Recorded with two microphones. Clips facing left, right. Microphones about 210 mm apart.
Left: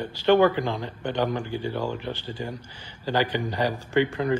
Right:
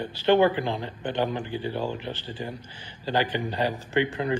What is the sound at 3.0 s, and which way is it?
Speech, 15° right (ahead or behind).